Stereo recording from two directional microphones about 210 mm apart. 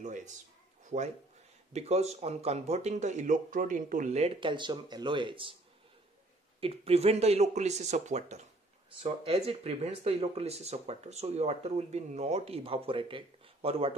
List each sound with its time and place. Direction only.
0.0 s speech: 35° right (ahead or behind)
6.6 s speech: 30° right (ahead or behind)